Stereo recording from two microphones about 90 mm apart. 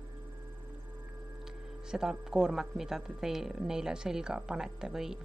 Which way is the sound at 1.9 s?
5° right (ahead or behind).